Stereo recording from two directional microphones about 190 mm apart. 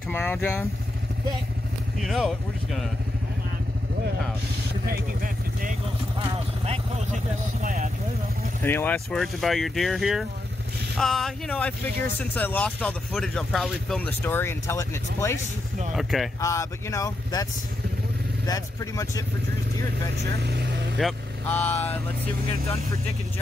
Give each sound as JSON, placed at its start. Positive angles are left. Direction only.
{"t": 0.1, "sound": "speech", "side_deg": 10}
{"t": 2.0, "sound": "speech", "side_deg": 0}
{"t": 4.8, "sound": "speech", "side_deg": -50}
{"t": 6.1, "sound": "speech", "side_deg": -30}
{"t": 8.6, "sound": "speech", "side_deg": 10}
{"t": 15.9, "sound": "speech", "side_deg": 0}
{"t": 16.3, "sound": "speech", "side_deg": 15}
{"t": 18.5, "sound": "speech", "side_deg": 15}
{"t": 20.2, "sound": "speech", "side_deg": -60}
{"t": 21.0, "sound": "speech", "side_deg": 0}
{"t": 21.5, "sound": "speech", "side_deg": 10}